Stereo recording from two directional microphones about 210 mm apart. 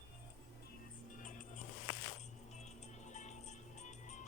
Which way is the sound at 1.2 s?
40° left (ahead or behind).